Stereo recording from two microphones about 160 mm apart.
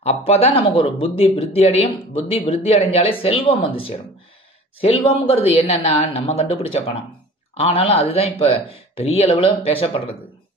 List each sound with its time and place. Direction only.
0.0 s speech: 40° left (ahead or behind)